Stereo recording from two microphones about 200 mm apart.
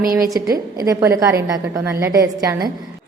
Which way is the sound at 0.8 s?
15° right (ahead or behind).